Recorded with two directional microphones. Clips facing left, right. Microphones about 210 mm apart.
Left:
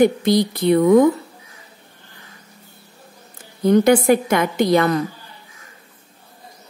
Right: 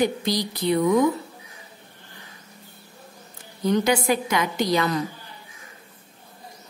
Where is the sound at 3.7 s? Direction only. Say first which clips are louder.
Left 7 dB; 50° left (ahead or behind).